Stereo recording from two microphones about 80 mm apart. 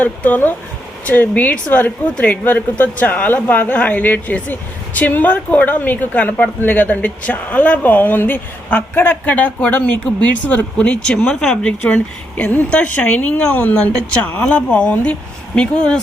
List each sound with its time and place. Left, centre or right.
0.0 s a woman's voice: left